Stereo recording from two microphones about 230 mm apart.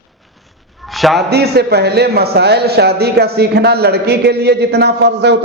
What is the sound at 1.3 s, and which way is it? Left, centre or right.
A man's voice, right.